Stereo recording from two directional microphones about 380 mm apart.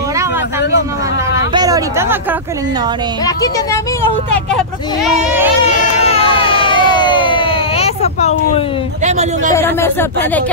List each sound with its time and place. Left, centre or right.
1.5 s a sound: centre
4.6 s speech: centre
5.8 s crowd: centre
9.0 s a man's voice: centre
9.5 s speech: centre